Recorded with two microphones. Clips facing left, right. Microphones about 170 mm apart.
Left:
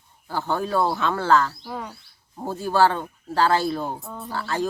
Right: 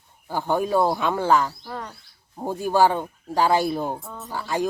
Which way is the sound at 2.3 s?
15° right (ahead or behind).